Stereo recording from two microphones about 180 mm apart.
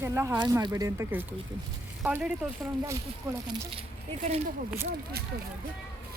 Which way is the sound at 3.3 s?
20° right (ahead or behind).